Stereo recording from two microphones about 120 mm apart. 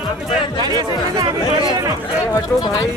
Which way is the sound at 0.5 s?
35° right (ahead or behind).